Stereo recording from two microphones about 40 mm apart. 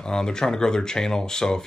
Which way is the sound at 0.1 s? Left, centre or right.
Centre.